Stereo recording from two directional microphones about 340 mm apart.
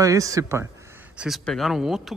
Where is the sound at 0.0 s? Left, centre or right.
Centre.